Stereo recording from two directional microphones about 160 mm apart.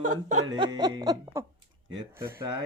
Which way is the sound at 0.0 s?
50° right (ahead or behind).